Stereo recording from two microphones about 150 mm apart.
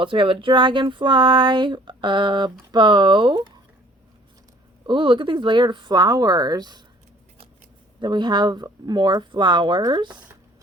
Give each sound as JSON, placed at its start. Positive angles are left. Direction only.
{"t": 0.0, "sound": "speech", "side_deg": -35}
{"t": 4.9, "sound": "speech", "side_deg": -30}
{"t": 8.0, "sound": "speech", "side_deg": -30}